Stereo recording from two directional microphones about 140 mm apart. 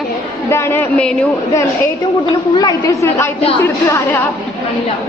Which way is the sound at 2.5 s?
25° left (ahead or behind).